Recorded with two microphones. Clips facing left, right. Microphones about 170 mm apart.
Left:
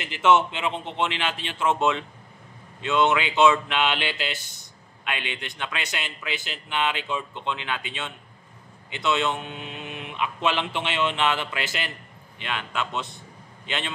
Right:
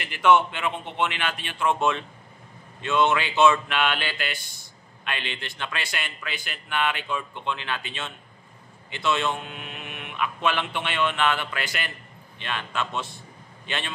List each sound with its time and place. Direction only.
0.0 s speech: 25° left (ahead or behind)